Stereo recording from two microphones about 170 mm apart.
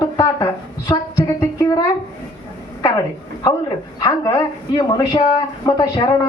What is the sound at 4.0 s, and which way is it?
Speech, 20° left (ahead or behind).